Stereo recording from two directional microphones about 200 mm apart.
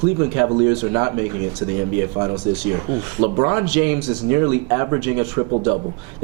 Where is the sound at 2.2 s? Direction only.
20° right (ahead or behind).